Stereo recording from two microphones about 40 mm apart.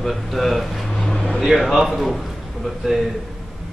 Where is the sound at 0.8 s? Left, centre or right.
Centre.